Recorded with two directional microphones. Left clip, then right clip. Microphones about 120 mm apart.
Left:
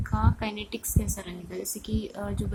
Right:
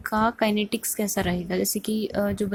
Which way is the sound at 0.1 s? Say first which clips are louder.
Right 8 dB; 45° right (ahead or behind).